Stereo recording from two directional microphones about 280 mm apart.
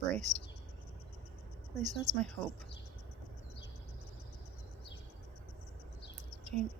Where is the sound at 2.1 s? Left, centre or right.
Centre.